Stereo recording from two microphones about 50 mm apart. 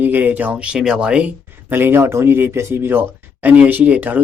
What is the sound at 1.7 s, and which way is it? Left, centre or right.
Speech, right.